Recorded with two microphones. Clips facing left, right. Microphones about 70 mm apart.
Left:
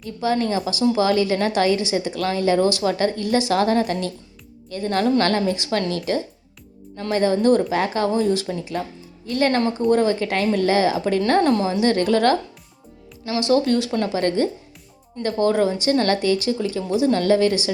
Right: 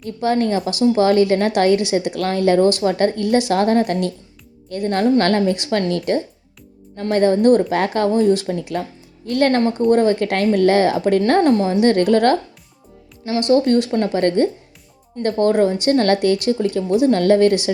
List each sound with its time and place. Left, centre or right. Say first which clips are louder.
0.0 s a woman's voice: right 3 dB; right
13.6 s a woman's voice: right 4 dB; right